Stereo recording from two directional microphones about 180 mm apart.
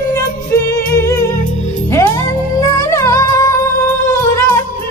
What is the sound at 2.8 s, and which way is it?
Music, 20° left (ahead or behind).